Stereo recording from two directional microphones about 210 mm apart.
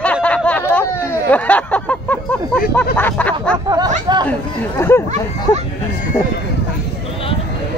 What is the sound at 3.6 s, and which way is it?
Speech, 20° right (ahead or behind).